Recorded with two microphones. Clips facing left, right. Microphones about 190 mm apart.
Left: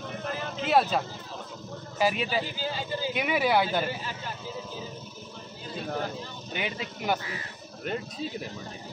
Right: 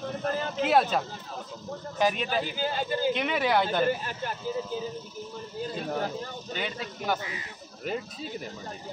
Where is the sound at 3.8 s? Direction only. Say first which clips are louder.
Right 6 dB; 50° right (ahead or behind).